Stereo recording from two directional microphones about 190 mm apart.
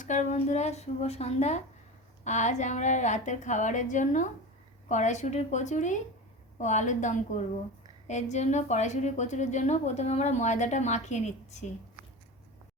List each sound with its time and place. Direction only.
0.0 s a woman's voice: 40° left (ahead or behind)